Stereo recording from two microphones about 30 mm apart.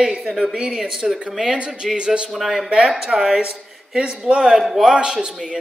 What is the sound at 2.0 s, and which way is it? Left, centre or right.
Speech, right.